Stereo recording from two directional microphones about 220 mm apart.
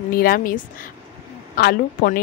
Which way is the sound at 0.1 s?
40° left (ahead or behind).